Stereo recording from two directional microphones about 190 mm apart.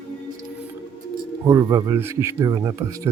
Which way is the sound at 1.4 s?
20° right (ahead or behind).